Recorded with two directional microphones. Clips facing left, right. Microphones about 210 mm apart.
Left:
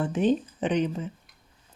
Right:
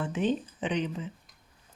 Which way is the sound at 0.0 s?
40° left (ahead or behind).